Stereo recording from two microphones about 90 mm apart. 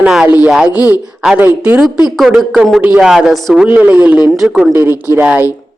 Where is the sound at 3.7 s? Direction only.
20° right (ahead or behind).